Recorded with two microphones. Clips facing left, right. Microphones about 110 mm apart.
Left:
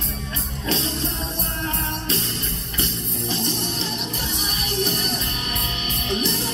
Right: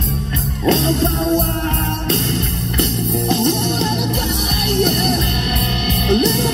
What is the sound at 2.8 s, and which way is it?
Music, 65° right (ahead or behind).